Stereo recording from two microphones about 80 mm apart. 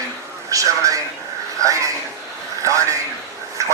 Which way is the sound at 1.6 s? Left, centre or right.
Right.